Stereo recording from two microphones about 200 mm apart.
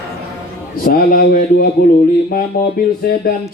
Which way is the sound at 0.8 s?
45° left (ahead or behind).